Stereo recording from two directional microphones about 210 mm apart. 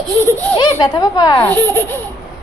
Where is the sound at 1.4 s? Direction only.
10° left (ahead or behind).